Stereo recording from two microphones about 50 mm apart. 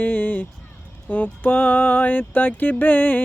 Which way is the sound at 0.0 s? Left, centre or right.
Left.